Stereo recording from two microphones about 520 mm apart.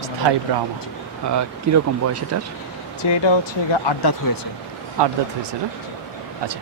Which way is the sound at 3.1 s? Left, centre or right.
Left.